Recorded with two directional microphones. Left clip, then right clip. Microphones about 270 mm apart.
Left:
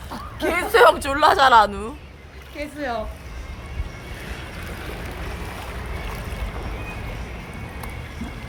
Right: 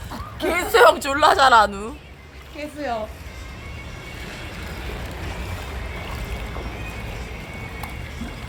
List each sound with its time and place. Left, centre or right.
0.3 s a woman's voice: centre
2.6 s speech: left